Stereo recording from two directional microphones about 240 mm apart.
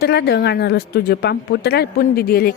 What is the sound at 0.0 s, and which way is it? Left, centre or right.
Speech, left.